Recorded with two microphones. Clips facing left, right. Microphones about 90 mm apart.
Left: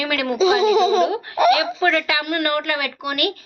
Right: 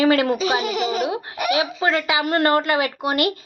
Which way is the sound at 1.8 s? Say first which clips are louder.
Left 1 dB; 20° right (ahead or behind).